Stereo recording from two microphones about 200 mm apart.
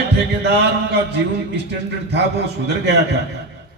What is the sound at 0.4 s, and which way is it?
Speech, 60° right (ahead or behind).